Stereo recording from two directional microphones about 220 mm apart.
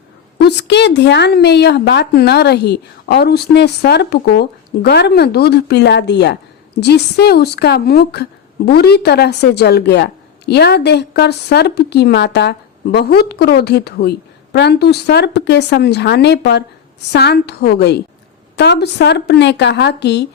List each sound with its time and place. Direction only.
0.3 s a woman's voice: 50° left (ahead or behind)